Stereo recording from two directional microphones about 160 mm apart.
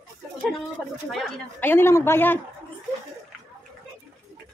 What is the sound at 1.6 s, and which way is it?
Speech, 15° left (ahead or behind).